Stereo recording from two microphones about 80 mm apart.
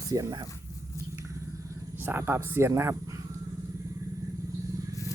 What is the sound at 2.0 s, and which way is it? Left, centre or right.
Speech, right.